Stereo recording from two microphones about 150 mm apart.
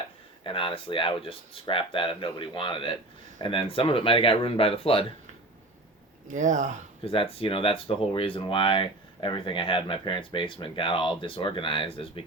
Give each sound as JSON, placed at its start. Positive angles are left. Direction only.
{"t": 0.4, "sound": "speech", "side_deg": 35}
{"t": 6.2, "sound": "speech", "side_deg": -55}
{"t": 7.0, "sound": "speech", "side_deg": 40}